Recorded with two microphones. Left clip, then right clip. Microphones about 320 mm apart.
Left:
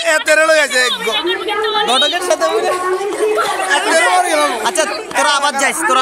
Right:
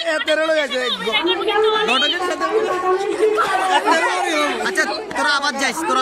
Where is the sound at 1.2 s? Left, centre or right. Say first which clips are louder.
Even; centre.